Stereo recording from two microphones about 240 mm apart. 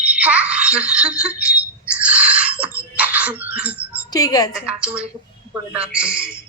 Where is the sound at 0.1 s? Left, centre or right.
Centre.